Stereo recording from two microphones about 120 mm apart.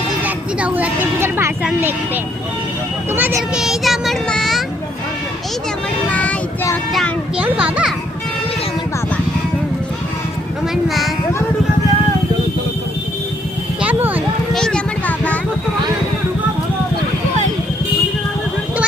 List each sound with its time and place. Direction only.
0.3 s speech: 15° right (ahead or behind)
3.1 s a child's voice: 15° right (ahead or behind)
3.6 s speech: centre (ahead or behind)
6.1 s child singing: 10° left (ahead or behind)
7.3 s a child's voice: 10° right (ahead or behind)
10.8 s speech: centre (ahead or behind)
13.8 s a sound: 15° right (ahead or behind)
14.5 s vehicle: 5° left (ahead or behind)